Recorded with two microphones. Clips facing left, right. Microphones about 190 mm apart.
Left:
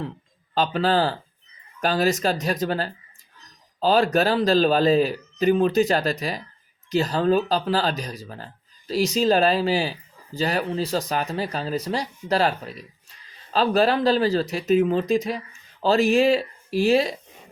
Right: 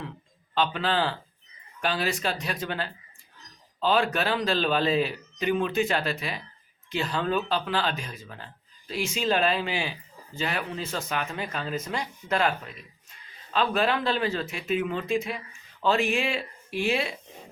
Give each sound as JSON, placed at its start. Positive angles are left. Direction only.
{"t": 0.5, "sound": "speech", "side_deg": 40}